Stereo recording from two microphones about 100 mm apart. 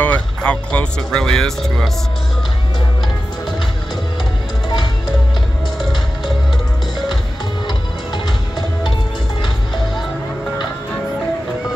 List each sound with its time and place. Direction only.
0.0 s speech: 15° left (ahead or behind)
5.8 s music: centre (ahead or behind)
7.6 s music: 50° left (ahead or behind)